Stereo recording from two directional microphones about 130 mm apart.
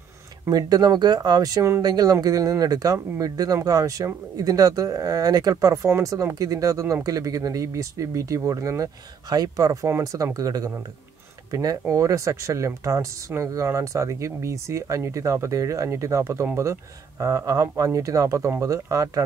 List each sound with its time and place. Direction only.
0.5 s speech: 30° right (ahead or behind)